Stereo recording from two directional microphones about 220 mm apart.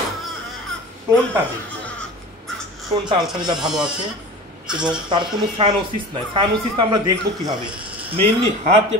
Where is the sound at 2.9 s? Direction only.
30° right (ahead or behind).